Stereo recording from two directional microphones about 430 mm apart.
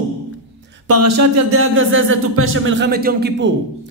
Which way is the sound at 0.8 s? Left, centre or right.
Right.